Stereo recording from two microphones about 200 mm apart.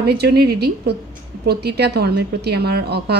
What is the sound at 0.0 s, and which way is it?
A woman's voice, 55° right (ahead or behind).